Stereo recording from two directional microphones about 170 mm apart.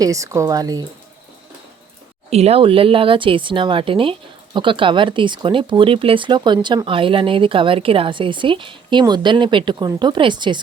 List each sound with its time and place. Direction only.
0.0 s speech: 20° right (ahead or behind)
2.3 s speech: 35° right (ahead or behind)